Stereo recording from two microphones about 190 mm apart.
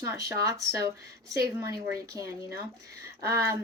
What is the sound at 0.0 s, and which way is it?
Speech, 15° right (ahead or behind).